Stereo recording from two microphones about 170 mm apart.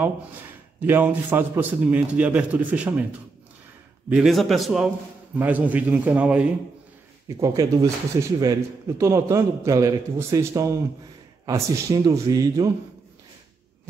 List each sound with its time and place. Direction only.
0.0 s speech: 10° right (ahead or behind)
4.1 s speech: centre (ahead or behind)
7.2 s a man's voice: 20° right (ahead or behind)